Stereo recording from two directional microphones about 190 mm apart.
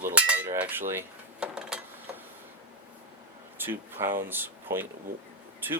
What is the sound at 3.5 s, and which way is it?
Speech, 10° right (ahead or behind).